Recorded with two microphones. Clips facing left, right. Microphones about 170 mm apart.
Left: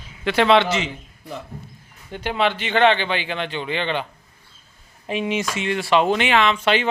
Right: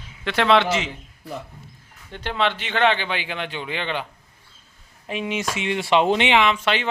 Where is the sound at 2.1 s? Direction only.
10° left (ahead or behind).